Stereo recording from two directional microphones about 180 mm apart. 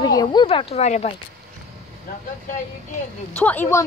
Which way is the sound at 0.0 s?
20° left (ahead or behind).